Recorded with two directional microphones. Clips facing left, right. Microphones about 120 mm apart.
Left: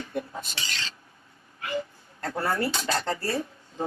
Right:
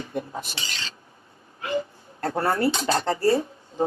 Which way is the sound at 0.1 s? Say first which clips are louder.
Right 2 dB; 20° right (ahead or behind).